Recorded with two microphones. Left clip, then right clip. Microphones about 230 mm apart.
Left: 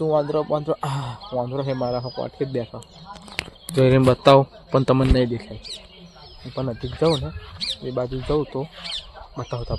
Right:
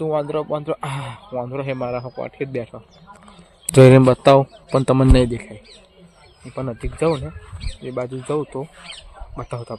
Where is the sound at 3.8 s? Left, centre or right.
Right.